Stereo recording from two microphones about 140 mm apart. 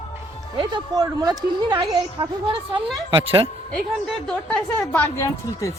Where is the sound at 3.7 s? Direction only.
5° left (ahead or behind).